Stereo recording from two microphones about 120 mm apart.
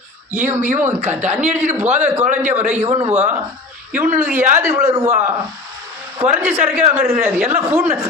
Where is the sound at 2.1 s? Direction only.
15° right (ahead or behind).